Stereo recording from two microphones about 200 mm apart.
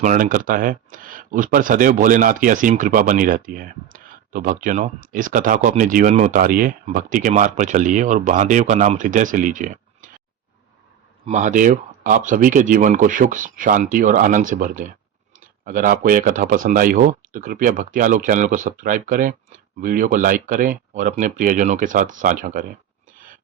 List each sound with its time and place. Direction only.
0.0 s speech: 40° right (ahead or behind)
11.3 s speech: 40° right (ahead or behind)
23.1 s a sound: 45° right (ahead or behind)